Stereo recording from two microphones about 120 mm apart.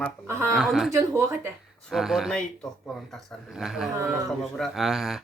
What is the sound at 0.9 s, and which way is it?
Speech, 25° right (ahead or behind).